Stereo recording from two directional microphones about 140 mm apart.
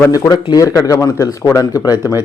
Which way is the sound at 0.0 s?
25° left (ahead or behind).